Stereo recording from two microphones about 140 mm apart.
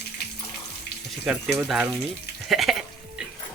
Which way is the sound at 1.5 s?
5° right (ahead or behind).